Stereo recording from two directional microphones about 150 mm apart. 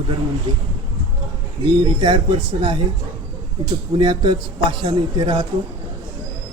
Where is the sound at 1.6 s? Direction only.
35° right (ahead or behind).